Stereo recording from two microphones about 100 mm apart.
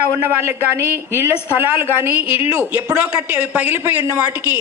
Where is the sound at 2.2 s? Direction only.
70° left (ahead or behind).